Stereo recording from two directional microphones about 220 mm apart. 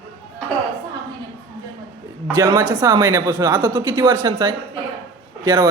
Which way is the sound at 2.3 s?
15° right (ahead or behind).